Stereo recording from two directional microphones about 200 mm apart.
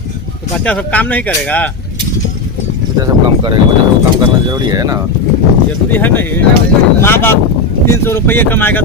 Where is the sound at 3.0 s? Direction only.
25° right (ahead or behind).